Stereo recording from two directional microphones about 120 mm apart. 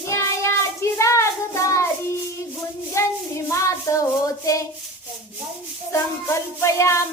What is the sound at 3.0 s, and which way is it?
Child singing, 25° left (ahead or behind).